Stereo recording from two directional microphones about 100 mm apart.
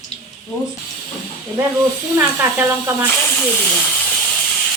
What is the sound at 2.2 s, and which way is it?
Speech, 25° right (ahead or behind).